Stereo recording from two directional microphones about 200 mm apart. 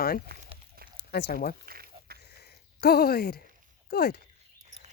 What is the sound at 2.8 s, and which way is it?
Speech, 50° left (ahead or behind).